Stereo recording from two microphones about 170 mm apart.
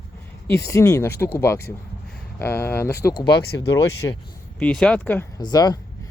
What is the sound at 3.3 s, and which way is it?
Speech, 70° left (ahead or behind).